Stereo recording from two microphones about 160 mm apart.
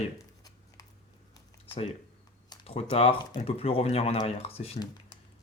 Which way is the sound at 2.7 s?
40° left (ahead or behind).